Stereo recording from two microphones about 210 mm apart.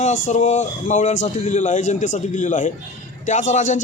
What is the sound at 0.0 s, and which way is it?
Speech, 35° left (ahead or behind).